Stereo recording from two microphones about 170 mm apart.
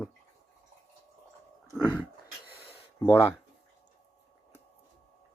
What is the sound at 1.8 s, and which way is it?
Speech, 10° left (ahead or behind).